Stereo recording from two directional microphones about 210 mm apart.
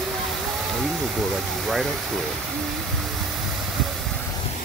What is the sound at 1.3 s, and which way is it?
Speech, centre (ahead or behind).